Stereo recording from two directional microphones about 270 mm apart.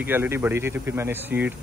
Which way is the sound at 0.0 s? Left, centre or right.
Centre.